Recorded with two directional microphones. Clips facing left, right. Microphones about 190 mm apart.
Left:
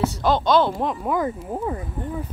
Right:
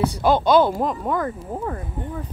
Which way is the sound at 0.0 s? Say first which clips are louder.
Right 2 dB; 10° right (ahead or behind).